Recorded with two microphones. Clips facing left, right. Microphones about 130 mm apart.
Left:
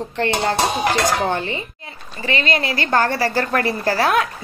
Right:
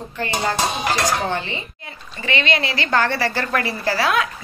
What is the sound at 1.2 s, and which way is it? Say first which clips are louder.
A woman's voice: left 3 dB; 45° left (ahead or behind).